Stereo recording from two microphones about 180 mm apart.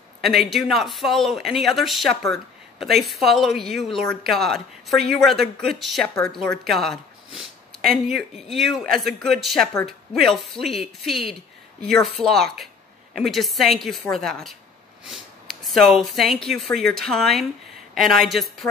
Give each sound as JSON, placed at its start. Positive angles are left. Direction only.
{"t": 0.3, "sound": "speech", "side_deg": 0}